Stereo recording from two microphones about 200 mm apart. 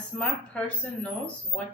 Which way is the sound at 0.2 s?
5° left (ahead or behind).